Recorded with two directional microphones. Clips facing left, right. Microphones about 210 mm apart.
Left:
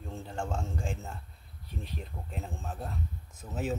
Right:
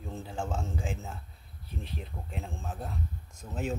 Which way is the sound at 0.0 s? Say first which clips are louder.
Right 1 dB; centre (ahead or behind).